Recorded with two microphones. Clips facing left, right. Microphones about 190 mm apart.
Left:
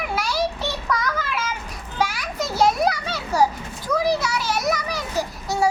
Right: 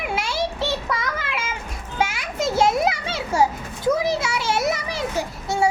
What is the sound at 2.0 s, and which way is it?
Children playing, 25° right (ahead or behind).